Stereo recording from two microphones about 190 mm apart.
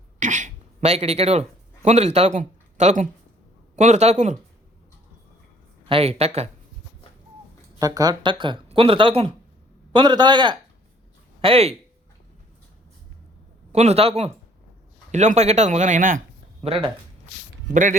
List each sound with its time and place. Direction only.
0.2 s speech: 40° right (ahead or behind)
5.9 s speech: 30° right (ahead or behind)
7.8 s speech: 20° right (ahead or behind)
13.7 s speech: 35° right (ahead or behind)
16.6 s speech: 30° right (ahead or behind)